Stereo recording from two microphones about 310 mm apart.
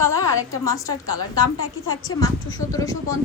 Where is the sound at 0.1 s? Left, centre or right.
Centre.